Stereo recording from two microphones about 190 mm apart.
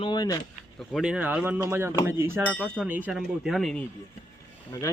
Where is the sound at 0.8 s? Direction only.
Centre (ahead or behind).